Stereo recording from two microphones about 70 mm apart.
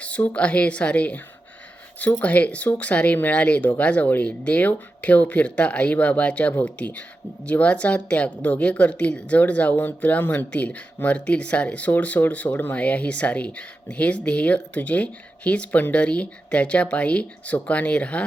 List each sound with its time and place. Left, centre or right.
0.0 s a woman's voice: centre